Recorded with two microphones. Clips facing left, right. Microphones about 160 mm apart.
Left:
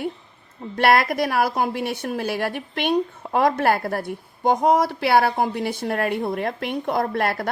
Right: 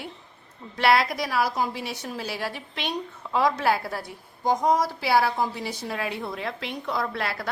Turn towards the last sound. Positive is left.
turn(degrees=50)  # may be behind; listen again after turning